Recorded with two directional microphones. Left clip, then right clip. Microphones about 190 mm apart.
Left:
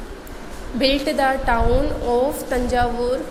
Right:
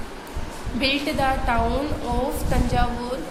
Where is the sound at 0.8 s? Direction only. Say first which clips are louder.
Left 4 dB; 25° left (ahead or behind).